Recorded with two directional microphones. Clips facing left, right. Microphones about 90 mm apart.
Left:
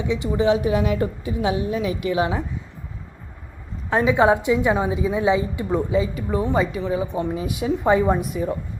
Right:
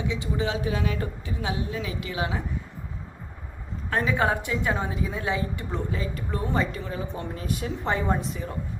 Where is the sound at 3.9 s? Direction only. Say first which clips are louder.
Left 7 dB; 20° left (ahead or behind).